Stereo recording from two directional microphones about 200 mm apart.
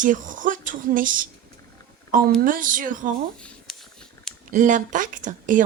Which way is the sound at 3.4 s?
5° left (ahead or behind).